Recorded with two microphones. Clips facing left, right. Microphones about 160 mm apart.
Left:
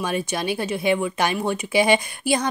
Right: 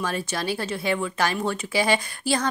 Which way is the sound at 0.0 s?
15° left (ahead or behind).